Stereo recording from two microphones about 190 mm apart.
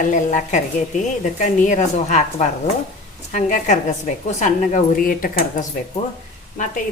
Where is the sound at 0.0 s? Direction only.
40° left (ahead or behind).